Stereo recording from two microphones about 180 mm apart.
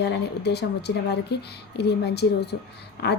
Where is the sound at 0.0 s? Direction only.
70° left (ahead or behind).